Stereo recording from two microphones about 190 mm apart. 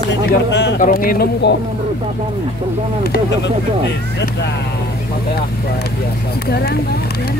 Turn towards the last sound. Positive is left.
turn(degrees=55)  # may be behind; listen again after turning